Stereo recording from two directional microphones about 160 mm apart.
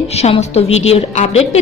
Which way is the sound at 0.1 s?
40° left (ahead or behind).